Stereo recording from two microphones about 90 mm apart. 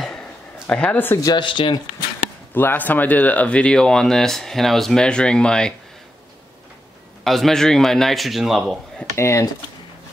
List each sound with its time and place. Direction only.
0.7 s speech: 15° left (ahead or behind)
1.2 s speech: 60° left (ahead or behind)
2.5 s speech: 25° left (ahead or behind)
7.2 s speech: 5° left (ahead or behind)
9.1 s speech: 30° left (ahead or behind)